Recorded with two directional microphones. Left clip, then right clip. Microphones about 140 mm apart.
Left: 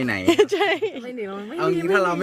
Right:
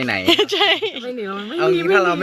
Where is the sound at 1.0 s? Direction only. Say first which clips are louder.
Right 5 dB; 85° right.